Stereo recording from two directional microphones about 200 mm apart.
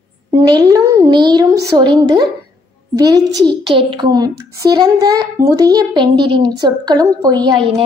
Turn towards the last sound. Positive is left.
turn(degrees=-20)  # may be behind; listen again after turning